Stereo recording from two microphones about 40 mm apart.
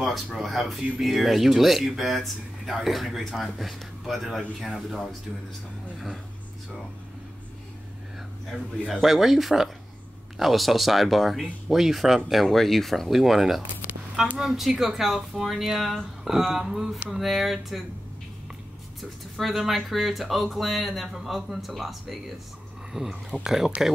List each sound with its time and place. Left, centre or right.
0.0 s speech: centre
9.0 s speech: centre
16.3 s speech: centre
18.9 s speech: centre